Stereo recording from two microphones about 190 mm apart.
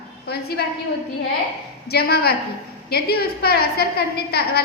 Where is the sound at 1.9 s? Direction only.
55° left (ahead or behind).